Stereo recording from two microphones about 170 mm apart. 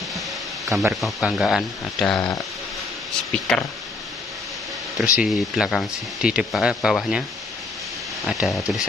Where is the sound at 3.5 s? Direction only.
5° left (ahead or behind).